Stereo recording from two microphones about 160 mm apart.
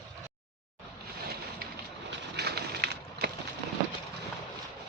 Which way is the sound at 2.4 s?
90° right.